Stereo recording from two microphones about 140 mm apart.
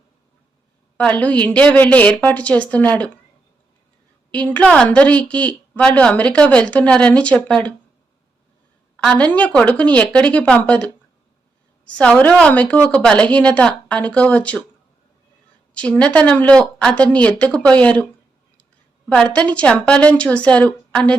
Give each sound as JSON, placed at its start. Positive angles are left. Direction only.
{"t": 0.9, "sound": "a woman's voice", "side_deg": 10}
{"t": 4.3, "sound": "a woman's voice", "side_deg": 10}
{"t": 9.0, "sound": "a woman's voice", "side_deg": 10}
{"t": 15.7, "sound": "a woman's voice", "side_deg": 10}
{"t": 19.0, "sound": "a woman's voice", "side_deg": 5}